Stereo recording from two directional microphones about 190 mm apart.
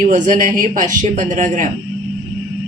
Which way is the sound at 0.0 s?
45° right (ahead or behind).